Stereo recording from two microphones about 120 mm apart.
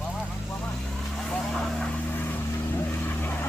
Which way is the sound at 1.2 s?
5° left (ahead or behind).